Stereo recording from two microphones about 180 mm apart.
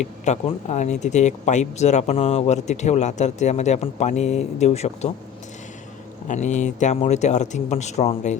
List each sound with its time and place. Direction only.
0.0 s speech: 40° left (ahead or behind)
6.2 s speech: 40° left (ahead or behind)